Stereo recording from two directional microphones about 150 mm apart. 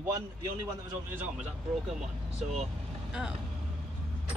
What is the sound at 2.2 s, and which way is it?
Speech, 45° right (ahead or behind).